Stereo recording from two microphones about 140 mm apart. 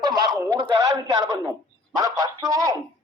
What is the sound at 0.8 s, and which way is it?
Speech, 25° right (ahead or behind).